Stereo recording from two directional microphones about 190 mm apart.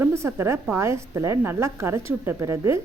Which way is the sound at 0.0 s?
15° right (ahead or behind).